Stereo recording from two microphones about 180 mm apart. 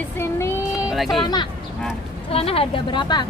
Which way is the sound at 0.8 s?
Centre (ahead or behind).